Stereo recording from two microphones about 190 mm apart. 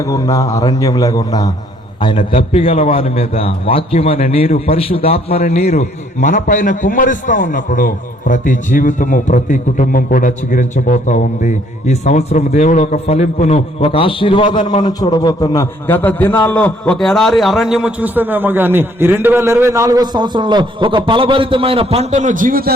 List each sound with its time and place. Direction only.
0.0 s a man's voice: 15° left (ahead or behind)
2.1 s a man's voice: 35° left (ahead or behind); by 22.7 s 50° right (ahead or behind)